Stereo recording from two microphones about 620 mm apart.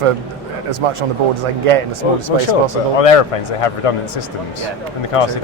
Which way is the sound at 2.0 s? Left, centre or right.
Left.